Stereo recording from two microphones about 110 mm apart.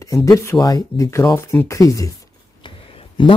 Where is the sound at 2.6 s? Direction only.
50° left (ahead or behind).